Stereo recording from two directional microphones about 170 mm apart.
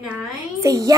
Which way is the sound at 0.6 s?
20° right (ahead or behind).